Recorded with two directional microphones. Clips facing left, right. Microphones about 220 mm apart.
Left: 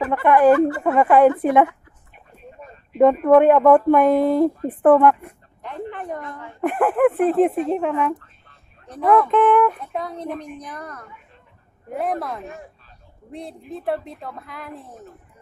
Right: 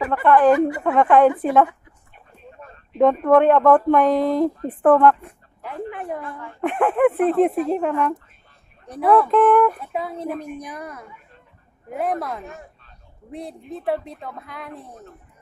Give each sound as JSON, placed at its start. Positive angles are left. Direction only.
{"t": 0.1, "sound": "speech", "side_deg": 15}
{"t": 0.5, "sound": "speech", "side_deg": -15}
{"t": 0.9, "sound": "a woman's voice", "side_deg": 5}
{"t": 5.6, "sound": "a woman's voice", "side_deg": -10}
{"t": 8.8, "sound": "speech", "side_deg": -10}
{"t": 9.1, "sound": "a woman's voice", "side_deg": 0}